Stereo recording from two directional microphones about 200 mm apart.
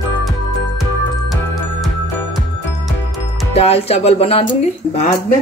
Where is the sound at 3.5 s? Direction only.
30° left (ahead or behind).